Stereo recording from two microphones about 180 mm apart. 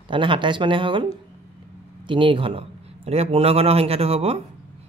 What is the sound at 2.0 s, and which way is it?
Speech, 30° right (ahead or behind).